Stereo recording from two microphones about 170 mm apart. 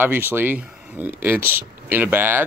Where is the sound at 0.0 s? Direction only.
10° right (ahead or behind).